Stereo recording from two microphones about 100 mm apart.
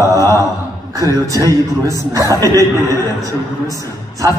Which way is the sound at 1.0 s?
35° left (ahead or behind).